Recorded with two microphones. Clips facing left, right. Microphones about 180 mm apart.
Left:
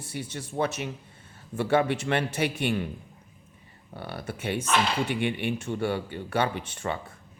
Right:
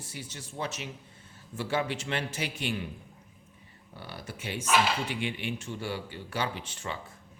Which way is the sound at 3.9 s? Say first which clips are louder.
Left 6 dB; 60° left (ahead or behind).